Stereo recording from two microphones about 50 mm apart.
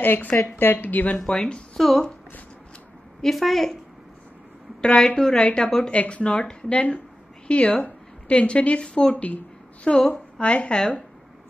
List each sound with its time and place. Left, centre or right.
0.0 s a woman's voice: left
1.1 s speech: centre
3.2 s a woman's voice: centre
4.8 s a woman's voice: centre